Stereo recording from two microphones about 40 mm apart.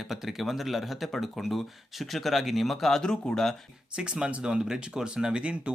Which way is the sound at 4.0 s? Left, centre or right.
Right.